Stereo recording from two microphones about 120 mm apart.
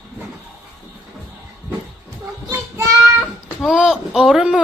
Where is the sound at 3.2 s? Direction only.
5° right (ahead or behind).